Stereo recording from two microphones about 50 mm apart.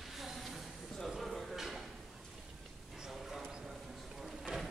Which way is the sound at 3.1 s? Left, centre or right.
Centre.